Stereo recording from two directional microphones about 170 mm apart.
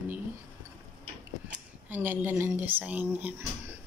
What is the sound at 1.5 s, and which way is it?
A woman's voice, 10° right (ahead or behind).